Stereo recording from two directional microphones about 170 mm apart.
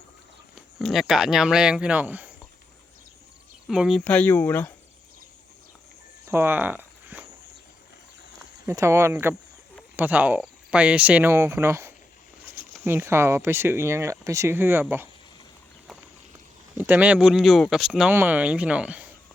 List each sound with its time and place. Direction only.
0.5 s speech: centre (ahead or behind)
3.7 s speech: centre (ahead or behind)
6.2 s a sound: 15° right (ahead or behind)
8.6 s speech: 15° right (ahead or behind)
16.7 s speech: 10° right (ahead or behind)